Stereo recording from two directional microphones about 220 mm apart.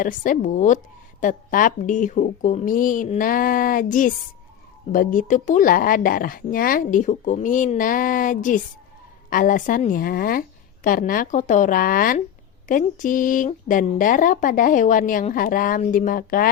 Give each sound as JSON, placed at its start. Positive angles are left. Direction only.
{"t": 0.0, "sound": "speech", "side_deg": 35}